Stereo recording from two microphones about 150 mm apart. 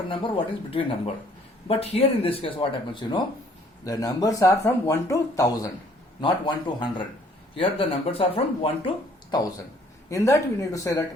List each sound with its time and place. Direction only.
0.1 s speech: 35° left (ahead or behind)
9.3 s speech: 25° left (ahead or behind)